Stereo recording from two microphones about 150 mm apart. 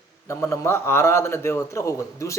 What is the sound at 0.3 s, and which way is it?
A man's voice, 20° left (ahead or behind).